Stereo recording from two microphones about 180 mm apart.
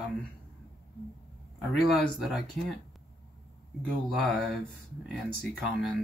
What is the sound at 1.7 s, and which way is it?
Speech, centre (ahead or behind).